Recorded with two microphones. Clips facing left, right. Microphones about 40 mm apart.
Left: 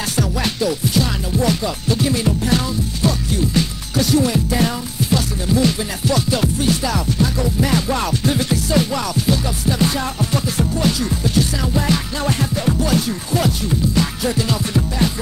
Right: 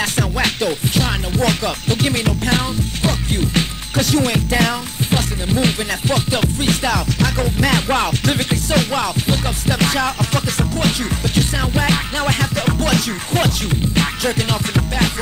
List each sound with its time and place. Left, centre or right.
0.0 s music: right
1.3 s music: right
3.0 s music: right
5.1 s music: right
9.7 s music: right